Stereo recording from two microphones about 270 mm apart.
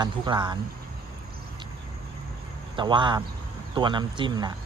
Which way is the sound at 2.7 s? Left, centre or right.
Centre.